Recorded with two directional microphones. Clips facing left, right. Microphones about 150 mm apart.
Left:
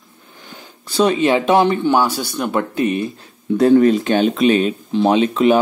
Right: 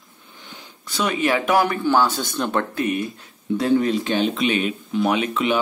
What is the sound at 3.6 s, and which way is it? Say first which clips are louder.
Speech: left 8 dB; 50° left (ahead or behind).